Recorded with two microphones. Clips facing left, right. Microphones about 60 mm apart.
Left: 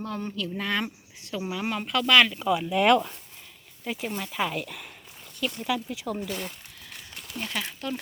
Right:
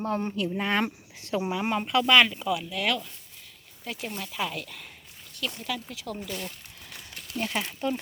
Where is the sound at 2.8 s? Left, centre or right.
Left.